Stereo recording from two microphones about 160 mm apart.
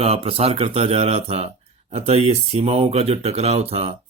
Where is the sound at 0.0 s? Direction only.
40° right (ahead or behind).